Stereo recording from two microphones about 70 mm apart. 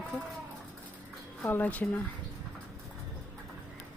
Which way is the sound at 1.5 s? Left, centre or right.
Left.